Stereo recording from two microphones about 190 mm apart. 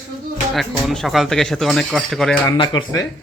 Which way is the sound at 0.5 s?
Centre (ahead or behind).